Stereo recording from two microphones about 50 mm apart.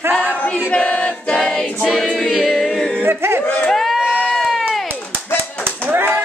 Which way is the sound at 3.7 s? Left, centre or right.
Centre.